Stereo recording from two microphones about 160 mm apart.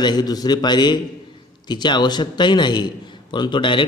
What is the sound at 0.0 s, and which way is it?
A man's voice, 25° left (ahead or behind).